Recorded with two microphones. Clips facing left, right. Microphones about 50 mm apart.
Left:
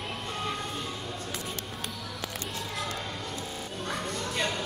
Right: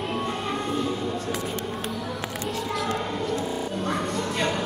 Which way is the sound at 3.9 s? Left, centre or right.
Centre.